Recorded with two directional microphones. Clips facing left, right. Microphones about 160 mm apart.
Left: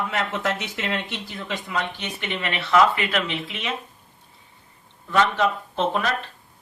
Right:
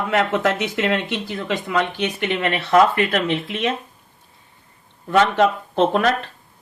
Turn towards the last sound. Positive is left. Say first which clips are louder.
# right 6 dB
turn(degrees=-55)  # may be behind; listen again after turning